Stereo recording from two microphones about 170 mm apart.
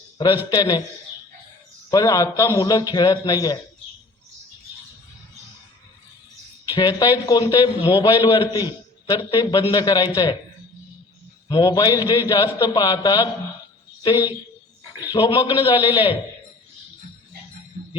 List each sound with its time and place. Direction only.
0.2 s a man's voice: 25° left (ahead or behind)
1.9 s a man's voice: 20° left (ahead or behind)
6.7 s a man's voice: 25° left (ahead or behind)
11.4 s a man's voice: 25° left (ahead or behind)